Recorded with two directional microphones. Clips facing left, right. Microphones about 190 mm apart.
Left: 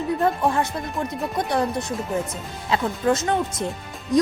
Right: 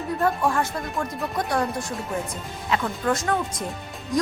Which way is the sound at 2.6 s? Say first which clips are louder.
Left 3 dB; 25° left (ahead or behind).